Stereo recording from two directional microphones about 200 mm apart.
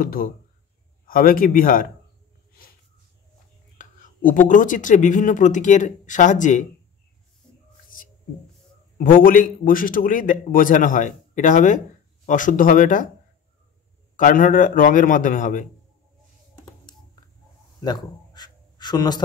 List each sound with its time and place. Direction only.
0.0 s a man's voice: 45° left (ahead or behind)
3.7 s speech: 40° left (ahead or behind)
8.9 s a man's voice: 45° left (ahead or behind)
14.1 s speech: 45° left (ahead or behind)
17.8 s writing: 20° left (ahead or behind)